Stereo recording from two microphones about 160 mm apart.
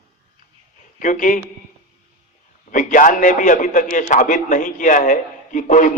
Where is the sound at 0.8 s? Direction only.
55° left (ahead or behind).